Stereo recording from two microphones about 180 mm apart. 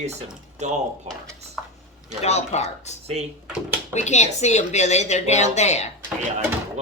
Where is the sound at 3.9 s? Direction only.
40° left (ahead or behind).